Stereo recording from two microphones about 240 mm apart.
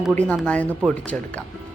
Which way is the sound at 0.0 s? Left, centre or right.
Centre.